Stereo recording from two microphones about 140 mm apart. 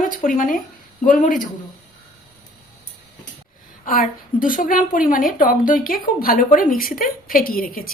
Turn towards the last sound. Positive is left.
turn(degrees=90)